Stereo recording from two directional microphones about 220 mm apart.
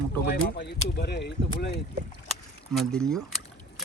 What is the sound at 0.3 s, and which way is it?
Speech, 45° left (ahead or behind).